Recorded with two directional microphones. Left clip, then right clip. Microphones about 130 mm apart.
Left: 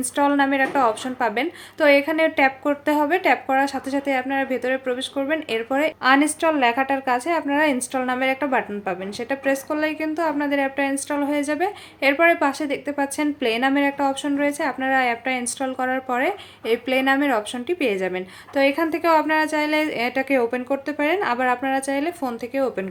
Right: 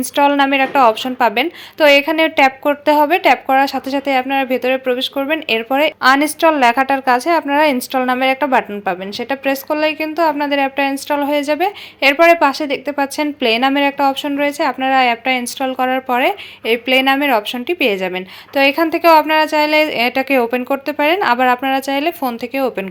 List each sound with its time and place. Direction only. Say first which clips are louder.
0.0 s a woman's voice: right 7 dB; 25° right (ahead or behind)